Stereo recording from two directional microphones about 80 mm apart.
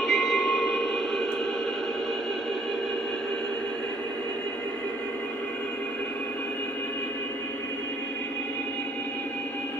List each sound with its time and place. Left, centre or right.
0.0 s train: centre